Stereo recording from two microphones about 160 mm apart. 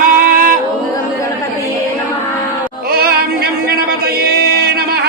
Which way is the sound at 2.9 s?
75° right (ahead or behind).